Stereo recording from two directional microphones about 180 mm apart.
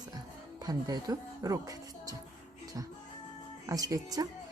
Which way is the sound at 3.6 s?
20° right (ahead or behind).